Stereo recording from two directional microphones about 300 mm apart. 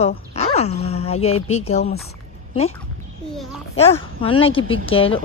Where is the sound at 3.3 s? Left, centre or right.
Centre.